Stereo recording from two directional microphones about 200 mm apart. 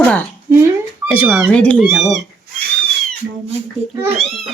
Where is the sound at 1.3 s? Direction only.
5° left (ahead or behind).